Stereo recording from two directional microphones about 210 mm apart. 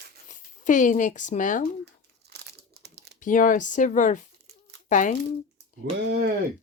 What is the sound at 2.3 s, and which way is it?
Crumpling, 50° right (ahead or behind).